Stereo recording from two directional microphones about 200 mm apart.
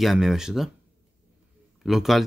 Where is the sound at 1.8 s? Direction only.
Centre (ahead or behind).